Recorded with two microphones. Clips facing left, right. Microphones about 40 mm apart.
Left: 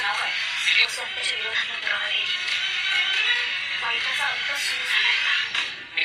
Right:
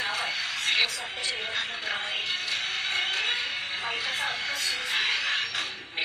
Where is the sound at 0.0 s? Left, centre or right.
Left.